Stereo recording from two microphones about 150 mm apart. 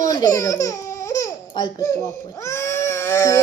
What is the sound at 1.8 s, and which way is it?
Speech, 20° left (ahead or behind).